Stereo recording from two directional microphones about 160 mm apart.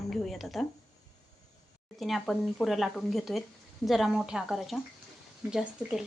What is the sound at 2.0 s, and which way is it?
Speech, centre (ahead or behind).